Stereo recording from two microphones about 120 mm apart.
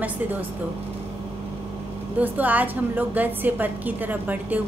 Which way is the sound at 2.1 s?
15° right (ahead or behind).